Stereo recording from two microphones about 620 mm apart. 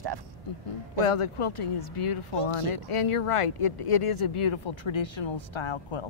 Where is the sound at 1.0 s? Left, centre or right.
Left.